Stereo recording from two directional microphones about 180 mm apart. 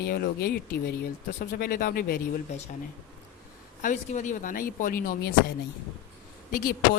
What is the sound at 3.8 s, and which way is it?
Speech, 40° left (ahead or behind).